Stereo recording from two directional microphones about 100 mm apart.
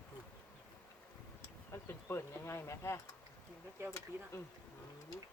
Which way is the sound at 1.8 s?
25° left (ahead or behind).